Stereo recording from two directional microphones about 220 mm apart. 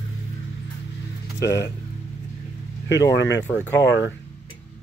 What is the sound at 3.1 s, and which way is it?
Speech, 55° left (ahead or behind).